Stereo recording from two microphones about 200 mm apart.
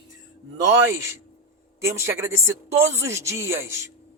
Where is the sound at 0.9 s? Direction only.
15° right (ahead or behind).